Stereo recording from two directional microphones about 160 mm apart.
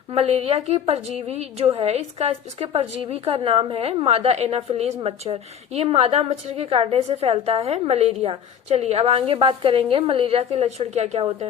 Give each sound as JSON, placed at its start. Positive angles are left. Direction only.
{"t": 0.1, "sound": "a woman's voice", "side_deg": -40}